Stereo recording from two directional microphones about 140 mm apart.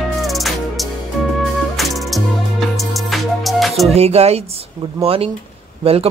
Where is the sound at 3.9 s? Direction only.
50° right (ahead or behind).